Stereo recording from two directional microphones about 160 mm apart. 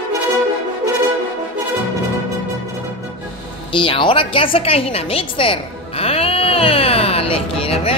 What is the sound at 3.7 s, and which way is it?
Music, 30° left (ahead or behind).